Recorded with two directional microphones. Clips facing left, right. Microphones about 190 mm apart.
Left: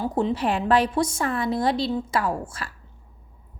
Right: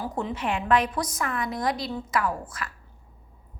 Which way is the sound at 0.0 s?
30° left (ahead or behind).